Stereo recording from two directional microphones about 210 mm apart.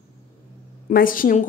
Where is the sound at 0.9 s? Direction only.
40° left (ahead or behind).